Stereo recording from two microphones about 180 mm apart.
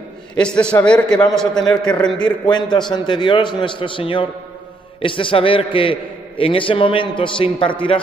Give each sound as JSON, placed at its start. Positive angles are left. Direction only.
{"t": 0.4, "sound": "a man's voice", "side_deg": 5}
{"t": 2.4, "sound": "a man's voice", "side_deg": 25}